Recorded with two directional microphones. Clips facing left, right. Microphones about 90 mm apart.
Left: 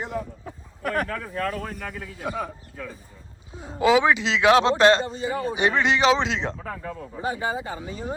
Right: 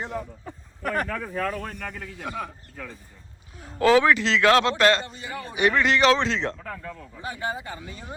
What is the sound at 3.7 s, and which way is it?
A man's voice, 15° left (ahead or behind).